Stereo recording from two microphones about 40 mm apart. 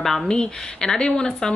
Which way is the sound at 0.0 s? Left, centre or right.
Centre.